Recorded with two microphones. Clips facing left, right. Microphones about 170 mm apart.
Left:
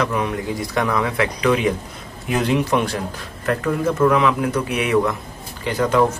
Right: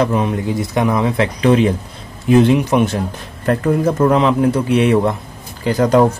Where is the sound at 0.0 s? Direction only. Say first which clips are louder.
Right 5 dB; 25° right (ahead or behind).